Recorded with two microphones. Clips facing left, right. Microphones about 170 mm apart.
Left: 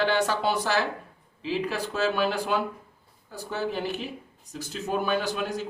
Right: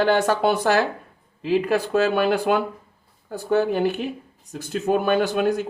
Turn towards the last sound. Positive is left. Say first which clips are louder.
# right 8 dB
turn(degrees=-55)  # may be behind; listen again after turning